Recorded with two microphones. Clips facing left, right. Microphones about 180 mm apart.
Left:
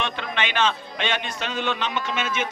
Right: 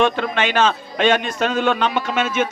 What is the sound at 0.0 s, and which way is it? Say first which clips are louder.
A man's voice: right 9 dB; 45° right (ahead or behind).